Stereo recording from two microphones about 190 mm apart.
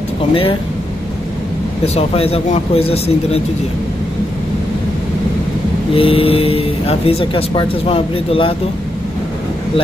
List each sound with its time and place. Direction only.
0.3 s speech: 30° left (ahead or behind)
2.0 s speech: 30° left (ahead or behind)
5.9 s speech: 30° left (ahead or behind)